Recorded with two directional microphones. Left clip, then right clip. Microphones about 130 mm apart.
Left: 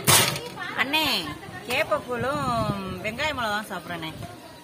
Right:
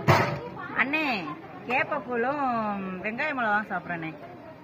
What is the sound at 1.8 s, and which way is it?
Speech, 60° left (ahead or behind).